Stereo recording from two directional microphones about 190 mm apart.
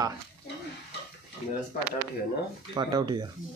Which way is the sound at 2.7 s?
25° right (ahead or behind).